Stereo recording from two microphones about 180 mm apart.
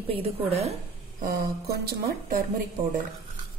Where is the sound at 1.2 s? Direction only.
55° right (ahead or behind).